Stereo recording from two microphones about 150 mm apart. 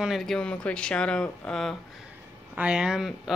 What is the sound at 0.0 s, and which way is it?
Speech, centre (ahead or behind).